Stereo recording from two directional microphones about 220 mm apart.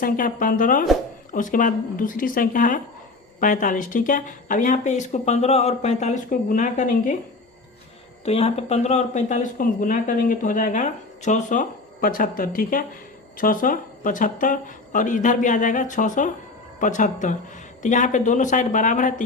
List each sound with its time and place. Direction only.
0.0 s speech: 35° left (ahead or behind)
8.2 s speech: 30° left (ahead or behind)